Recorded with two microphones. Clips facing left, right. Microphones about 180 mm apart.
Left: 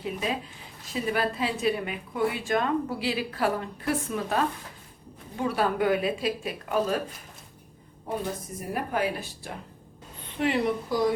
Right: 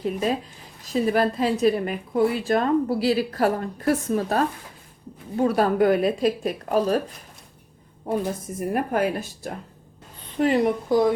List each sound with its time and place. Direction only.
0.0 s a woman's voice: 40° right (ahead or behind)
8.7 s speech: 50° right (ahead or behind)